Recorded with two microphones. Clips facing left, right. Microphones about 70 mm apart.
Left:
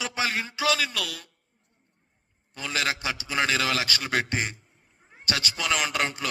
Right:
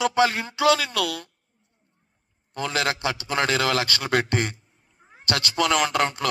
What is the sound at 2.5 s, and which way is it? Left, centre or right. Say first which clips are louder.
A man's voice: right 4 dB; right.